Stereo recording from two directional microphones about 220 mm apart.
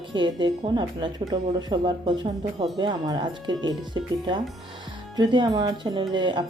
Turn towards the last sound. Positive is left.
turn(degrees=-20)  # may be behind; listen again after turning